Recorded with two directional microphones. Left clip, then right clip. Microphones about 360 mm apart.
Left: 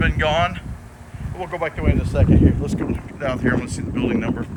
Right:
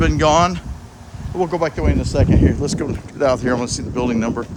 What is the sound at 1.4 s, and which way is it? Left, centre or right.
Speech, right.